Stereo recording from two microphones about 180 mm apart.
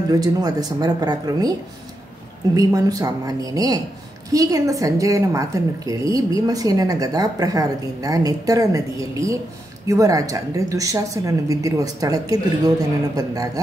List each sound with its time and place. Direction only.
0.1 s a woman's voice: 20° right (ahead or behind)
2.5 s a woman's voice: 20° right (ahead or behind)